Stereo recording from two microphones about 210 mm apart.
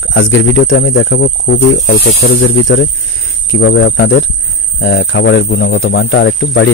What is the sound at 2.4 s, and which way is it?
Speech, 65° left (ahead or behind).